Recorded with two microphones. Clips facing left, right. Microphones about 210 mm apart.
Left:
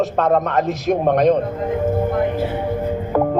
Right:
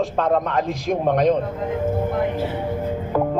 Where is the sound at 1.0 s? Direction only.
55° left (ahead or behind).